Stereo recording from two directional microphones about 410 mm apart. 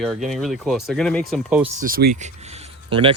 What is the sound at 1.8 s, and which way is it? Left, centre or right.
Speech, right.